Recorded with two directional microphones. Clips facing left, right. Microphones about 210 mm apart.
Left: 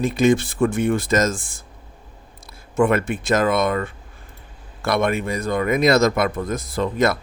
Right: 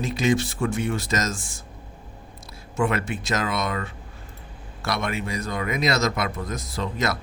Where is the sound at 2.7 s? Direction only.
50° left (ahead or behind).